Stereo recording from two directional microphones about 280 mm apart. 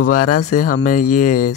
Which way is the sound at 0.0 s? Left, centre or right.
Left.